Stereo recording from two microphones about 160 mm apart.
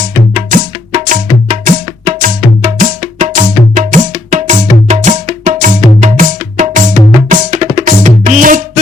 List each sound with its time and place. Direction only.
0.0 s music: 55° right (ahead or behind)